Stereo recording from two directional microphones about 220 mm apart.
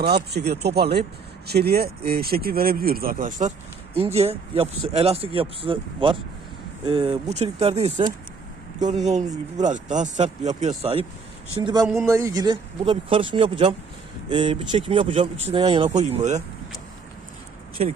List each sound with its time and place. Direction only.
0.3 s speech: 50° right (ahead or behind); by 9.2 s 30° right (ahead or behind)
9.2 s speech: 15° right (ahead or behind)
9.6 s speech: 35° right (ahead or behind)